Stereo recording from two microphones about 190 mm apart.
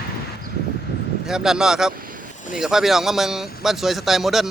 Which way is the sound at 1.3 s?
5° right (ahead or behind).